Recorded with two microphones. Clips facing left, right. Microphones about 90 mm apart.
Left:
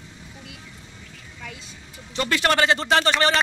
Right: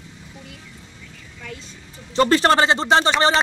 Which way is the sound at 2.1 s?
35° right (ahead or behind).